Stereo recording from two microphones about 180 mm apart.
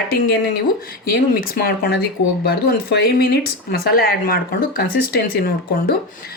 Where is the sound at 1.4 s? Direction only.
55° left (ahead or behind).